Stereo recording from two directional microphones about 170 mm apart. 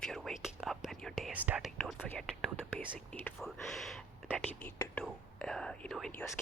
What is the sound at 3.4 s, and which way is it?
Speech, centre (ahead or behind).